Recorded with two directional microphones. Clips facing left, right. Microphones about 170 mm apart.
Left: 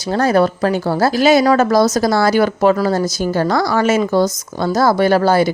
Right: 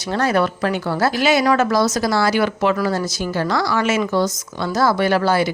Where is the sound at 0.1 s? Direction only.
35° left (ahead or behind).